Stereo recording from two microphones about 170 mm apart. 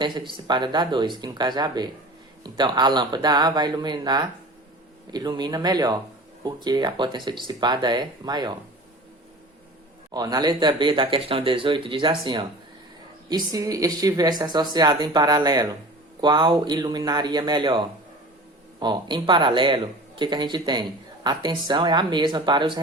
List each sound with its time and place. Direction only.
0.0 s speech: 30° right (ahead or behind)
10.1 s speech: 25° right (ahead or behind)